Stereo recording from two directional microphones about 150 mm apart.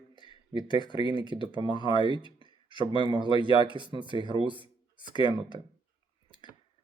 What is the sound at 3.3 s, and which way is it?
Speech, 35° left (ahead or behind).